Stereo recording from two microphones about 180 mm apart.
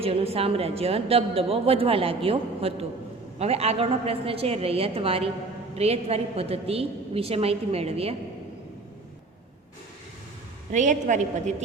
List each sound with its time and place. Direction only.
0.0 s a woman's voice: 35° right (ahead or behind)
10.7 s a woman's voice: 45° right (ahead or behind)